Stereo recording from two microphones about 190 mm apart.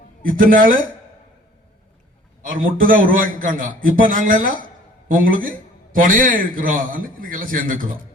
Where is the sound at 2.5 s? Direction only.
45° right (ahead or behind).